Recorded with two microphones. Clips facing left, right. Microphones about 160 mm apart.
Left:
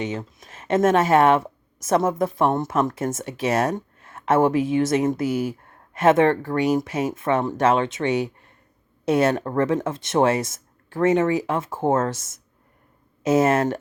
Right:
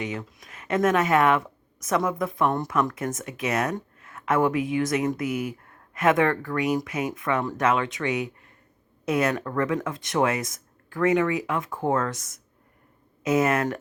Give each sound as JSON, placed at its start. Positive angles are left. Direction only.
{"t": 0.0, "sound": "speech", "side_deg": 25}
{"t": 13.2, "sound": "speech", "side_deg": 30}